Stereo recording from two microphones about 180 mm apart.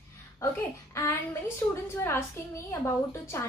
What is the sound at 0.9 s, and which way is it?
Speech, 15° left (ahead or behind).